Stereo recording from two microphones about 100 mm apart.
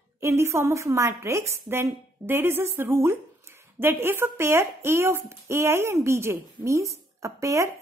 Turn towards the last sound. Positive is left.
turn(degrees=-30)  # may be behind; listen again after turning